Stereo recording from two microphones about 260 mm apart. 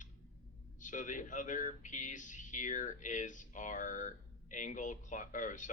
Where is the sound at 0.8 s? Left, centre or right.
Left.